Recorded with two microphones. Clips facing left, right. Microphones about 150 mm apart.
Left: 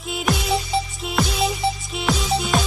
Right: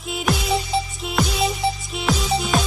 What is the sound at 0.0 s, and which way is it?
Music, centre (ahead or behind).